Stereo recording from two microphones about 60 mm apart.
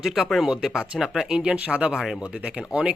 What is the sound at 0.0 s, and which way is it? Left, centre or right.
Speech, centre.